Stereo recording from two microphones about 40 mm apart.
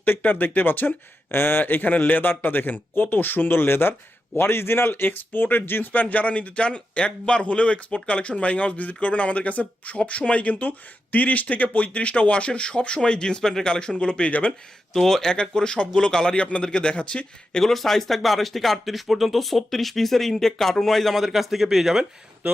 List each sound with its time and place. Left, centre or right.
0.2 s speech: left
4.4 s a man's voice: left
14.9 s speech: centre
15.3 s a man's voice: left
17.6 s speech: centre
22.4 s speech: right